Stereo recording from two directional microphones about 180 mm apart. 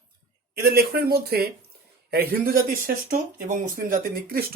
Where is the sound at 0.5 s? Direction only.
60° right (ahead or behind).